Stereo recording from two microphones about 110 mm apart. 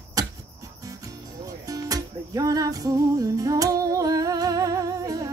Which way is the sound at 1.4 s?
30° right (ahead or behind).